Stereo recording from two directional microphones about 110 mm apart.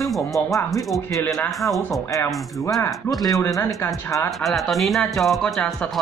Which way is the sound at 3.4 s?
25° left (ahead or behind).